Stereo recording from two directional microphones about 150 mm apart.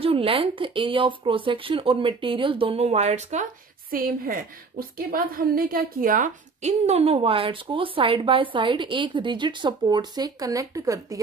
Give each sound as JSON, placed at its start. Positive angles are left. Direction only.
{"t": 0.0, "sound": "a woman's voice", "side_deg": -40}
{"t": 3.9, "sound": "a woman's voice", "side_deg": -70}